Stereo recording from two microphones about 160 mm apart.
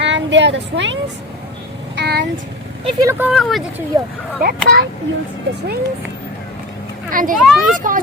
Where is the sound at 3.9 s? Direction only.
20° right (ahead or behind).